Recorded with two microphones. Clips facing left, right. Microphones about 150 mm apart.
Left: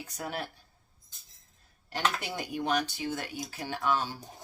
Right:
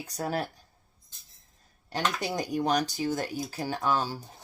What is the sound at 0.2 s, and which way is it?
Speech, 35° right (ahead or behind).